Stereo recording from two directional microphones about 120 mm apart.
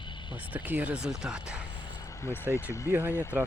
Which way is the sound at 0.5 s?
15° right (ahead or behind).